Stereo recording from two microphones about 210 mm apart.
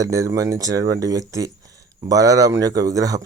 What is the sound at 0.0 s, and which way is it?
Speech, 15° right (ahead or behind).